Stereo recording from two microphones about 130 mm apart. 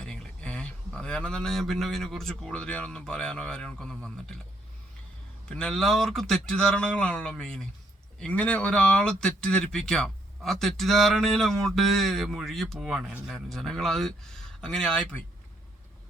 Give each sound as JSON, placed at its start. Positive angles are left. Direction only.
{"t": 0.0, "sound": "speech", "side_deg": 5}
{"t": 5.5, "sound": "speech", "side_deg": 5}